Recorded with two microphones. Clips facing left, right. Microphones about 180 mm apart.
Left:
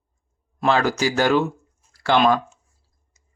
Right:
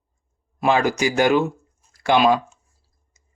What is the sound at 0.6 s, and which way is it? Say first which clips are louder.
Speech: right 1 dB; 15° right (ahead or behind).